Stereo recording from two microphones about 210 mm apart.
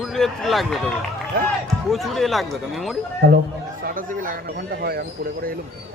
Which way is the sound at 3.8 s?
40° right (ahead or behind).